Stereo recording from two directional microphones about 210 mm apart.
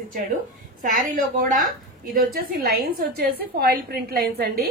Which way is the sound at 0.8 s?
40° right (ahead or behind).